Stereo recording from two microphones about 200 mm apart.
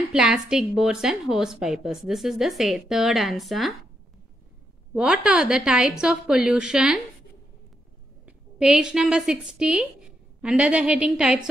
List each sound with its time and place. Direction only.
0.1 s a woman's voice: 5° right (ahead or behind)
4.9 s a woman's voice: 5° right (ahead or behind)
8.3 s a woman's voice: 5° right (ahead or behind)